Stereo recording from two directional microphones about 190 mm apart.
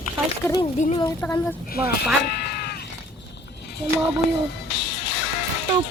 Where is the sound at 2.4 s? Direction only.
55° left (ahead or behind).